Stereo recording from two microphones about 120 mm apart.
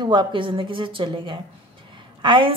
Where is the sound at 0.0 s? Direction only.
40° right (ahead or behind).